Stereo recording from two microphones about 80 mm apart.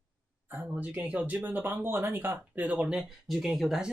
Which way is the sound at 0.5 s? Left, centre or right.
Right.